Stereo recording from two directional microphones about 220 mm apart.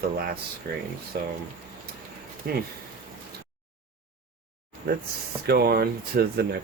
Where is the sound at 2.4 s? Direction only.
40° right (ahead or behind).